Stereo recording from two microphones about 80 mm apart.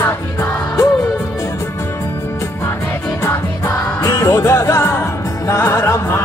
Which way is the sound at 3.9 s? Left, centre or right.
Left.